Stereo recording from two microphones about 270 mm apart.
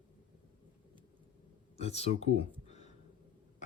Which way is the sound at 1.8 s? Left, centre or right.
Left.